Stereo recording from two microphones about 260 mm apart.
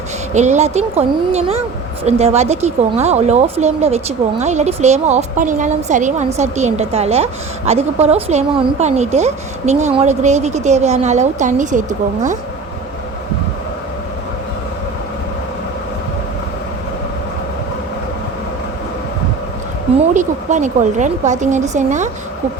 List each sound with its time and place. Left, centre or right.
0.3 s speech: right
20.0 s speech: right